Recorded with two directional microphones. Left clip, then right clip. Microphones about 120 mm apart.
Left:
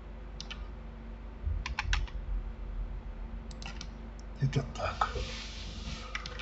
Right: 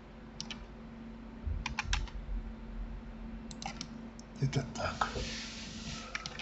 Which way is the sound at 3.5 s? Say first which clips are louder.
Right 3 dB; 25° right (ahead or behind).